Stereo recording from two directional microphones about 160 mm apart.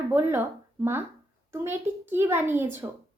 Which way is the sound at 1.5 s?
15° right (ahead or behind).